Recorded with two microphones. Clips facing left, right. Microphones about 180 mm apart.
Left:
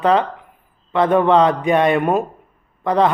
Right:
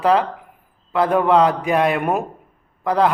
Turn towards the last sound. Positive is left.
turn(degrees=-5)  # may be behind; listen again after turning